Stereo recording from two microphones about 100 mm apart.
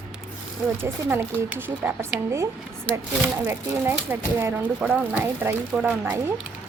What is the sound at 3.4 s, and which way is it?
A woman's voice, 25° right (ahead or behind).